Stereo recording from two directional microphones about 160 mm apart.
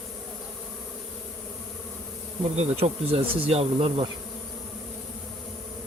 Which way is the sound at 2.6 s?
40° right (ahead or behind).